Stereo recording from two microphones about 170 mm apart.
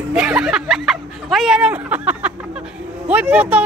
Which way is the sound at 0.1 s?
5° right (ahead or behind).